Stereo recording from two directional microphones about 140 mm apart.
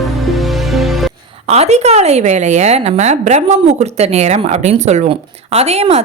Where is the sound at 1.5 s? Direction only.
50° right (ahead or behind).